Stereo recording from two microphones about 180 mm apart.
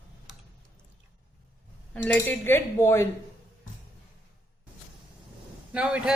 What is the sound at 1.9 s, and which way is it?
Speech, 10° left (ahead or behind).